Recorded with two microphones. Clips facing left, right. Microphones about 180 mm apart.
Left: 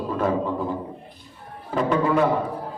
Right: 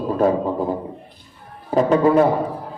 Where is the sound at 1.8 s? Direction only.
40° right (ahead or behind).